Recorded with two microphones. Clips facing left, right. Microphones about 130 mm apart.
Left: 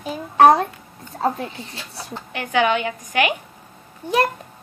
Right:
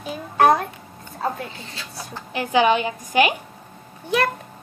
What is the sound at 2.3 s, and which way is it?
A woman's voice, 30° right (ahead or behind).